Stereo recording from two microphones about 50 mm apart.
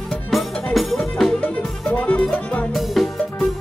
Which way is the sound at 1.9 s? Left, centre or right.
Left.